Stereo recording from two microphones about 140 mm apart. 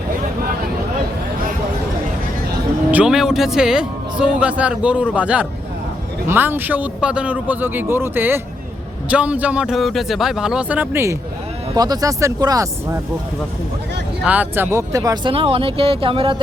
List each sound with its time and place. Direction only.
2.9 s speech: 5° right (ahead or behind); by 13.0 s 25° right (ahead or behind)
14.3 s speech: 15° right (ahead or behind); by 16.4 s 40° right (ahead or behind)